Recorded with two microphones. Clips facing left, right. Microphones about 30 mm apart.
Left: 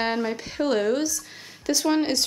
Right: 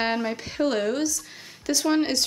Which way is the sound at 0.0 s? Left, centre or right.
Centre.